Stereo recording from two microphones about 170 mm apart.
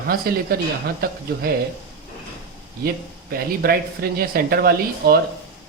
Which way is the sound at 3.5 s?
65° right (ahead or behind).